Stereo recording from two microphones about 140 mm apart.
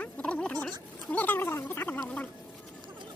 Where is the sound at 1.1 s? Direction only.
10° left (ahead or behind).